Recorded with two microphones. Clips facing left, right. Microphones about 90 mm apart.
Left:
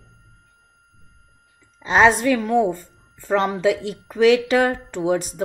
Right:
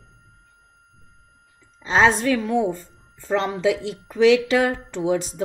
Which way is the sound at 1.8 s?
60° left (ahead or behind).